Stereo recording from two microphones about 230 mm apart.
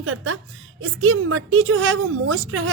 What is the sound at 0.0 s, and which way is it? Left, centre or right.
A woman's voice, right.